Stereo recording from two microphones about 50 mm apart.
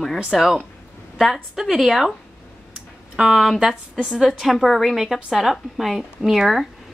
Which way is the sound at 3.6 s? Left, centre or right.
Centre.